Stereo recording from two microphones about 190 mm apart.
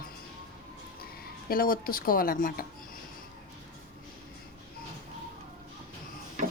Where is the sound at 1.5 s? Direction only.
50° left (ahead or behind).